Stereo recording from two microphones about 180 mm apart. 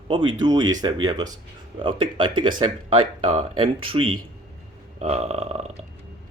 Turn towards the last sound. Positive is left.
turn(degrees=-35)  # may be behind; listen again after turning